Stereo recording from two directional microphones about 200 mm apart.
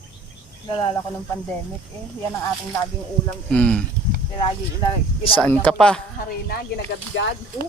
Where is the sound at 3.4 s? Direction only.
5° left (ahead or behind).